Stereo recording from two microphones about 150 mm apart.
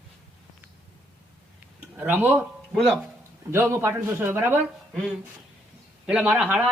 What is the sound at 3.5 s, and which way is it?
Speech, 15° right (ahead or behind).